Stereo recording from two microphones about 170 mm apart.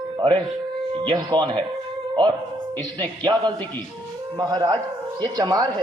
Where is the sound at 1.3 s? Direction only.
25° right (ahead or behind).